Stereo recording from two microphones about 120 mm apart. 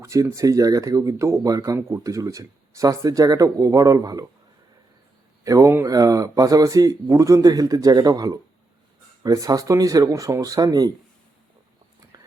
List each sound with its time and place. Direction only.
0.0 s speech: 25° right (ahead or behind)
5.4 s speech: 25° right (ahead or behind)
12.1 s whispering: 30° right (ahead or behind)